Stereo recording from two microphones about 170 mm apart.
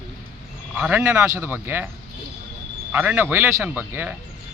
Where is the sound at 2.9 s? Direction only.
10° right (ahead or behind).